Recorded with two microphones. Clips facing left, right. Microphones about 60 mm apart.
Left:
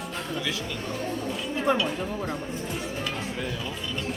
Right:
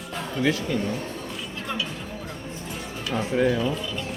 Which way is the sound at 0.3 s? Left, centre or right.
Right.